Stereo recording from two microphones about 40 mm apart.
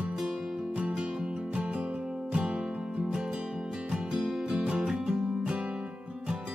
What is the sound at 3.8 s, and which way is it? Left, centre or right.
Music, centre.